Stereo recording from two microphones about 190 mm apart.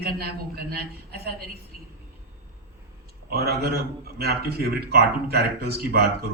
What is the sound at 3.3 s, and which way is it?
Speech, 55° right (ahead or behind).